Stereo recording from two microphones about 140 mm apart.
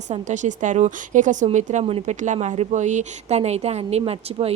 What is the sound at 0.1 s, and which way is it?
A woman's voice, 60° right (ahead or behind).